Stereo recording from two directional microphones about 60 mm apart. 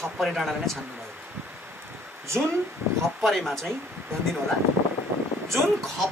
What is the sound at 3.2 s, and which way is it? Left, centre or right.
Speech, centre.